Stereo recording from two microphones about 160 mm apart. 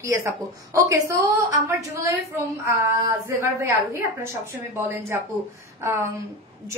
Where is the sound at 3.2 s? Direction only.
15° right (ahead or behind).